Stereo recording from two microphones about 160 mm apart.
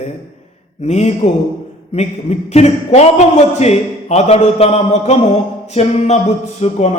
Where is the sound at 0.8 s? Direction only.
45° left (ahead or behind).